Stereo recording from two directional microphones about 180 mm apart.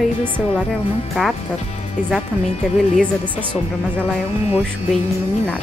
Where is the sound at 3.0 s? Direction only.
10° right (ahead or behind).